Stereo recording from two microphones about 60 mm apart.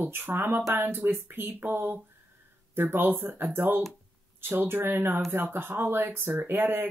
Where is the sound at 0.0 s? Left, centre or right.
Right.